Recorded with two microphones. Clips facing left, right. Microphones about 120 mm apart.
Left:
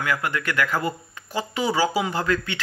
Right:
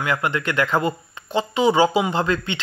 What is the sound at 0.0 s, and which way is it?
Speech, 20° right (ahead or behind).